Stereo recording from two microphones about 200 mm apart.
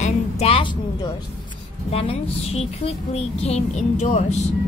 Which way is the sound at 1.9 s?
30° left (ahead or behind).